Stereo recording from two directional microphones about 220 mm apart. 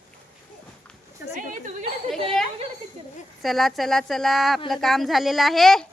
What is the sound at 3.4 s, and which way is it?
A woman's voice, centre (ahead or behind).